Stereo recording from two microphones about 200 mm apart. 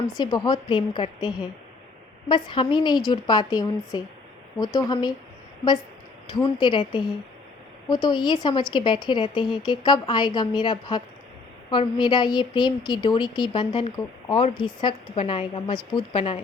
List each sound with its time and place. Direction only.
0.2 s a woman's voice: 20° left (ahead or behind)
6.3 s a woman's voice: 20° left (ahead or behind)
8.0 s a woman's voice: 20° left (ahead or behind)